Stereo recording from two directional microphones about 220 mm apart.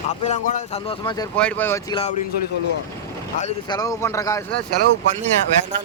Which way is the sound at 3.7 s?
15° left (ahead or behind).